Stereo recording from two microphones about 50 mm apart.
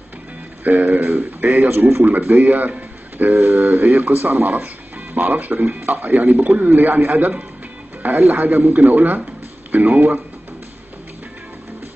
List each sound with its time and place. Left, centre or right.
0.7 s speech: right